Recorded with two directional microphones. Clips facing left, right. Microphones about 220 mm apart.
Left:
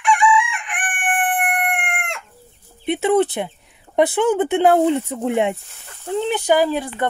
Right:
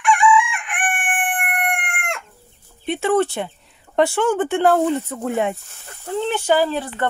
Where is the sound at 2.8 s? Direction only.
20° left (ahead or behind).